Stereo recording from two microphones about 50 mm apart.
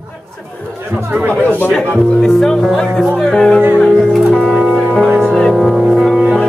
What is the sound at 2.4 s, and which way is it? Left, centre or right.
Speech, centre.